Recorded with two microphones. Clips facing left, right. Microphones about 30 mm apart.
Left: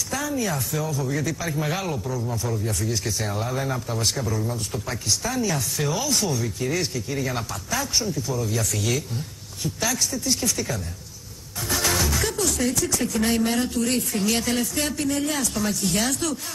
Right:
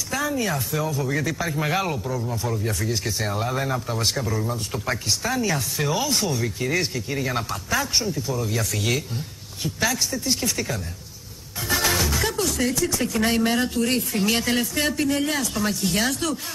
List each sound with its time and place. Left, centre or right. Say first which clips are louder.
0.1 s speech: right 2 dB; centre
11.7 s music: right 1 dB; centre
12.5 s speech: right 1 dB; centre